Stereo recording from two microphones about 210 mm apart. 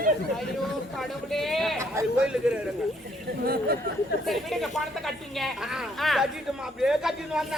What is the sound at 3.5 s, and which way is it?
Speech, 45° right (ahead or behind).